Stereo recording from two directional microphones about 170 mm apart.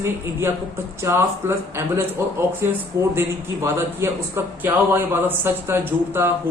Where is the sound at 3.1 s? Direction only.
15° right (ahead or behind).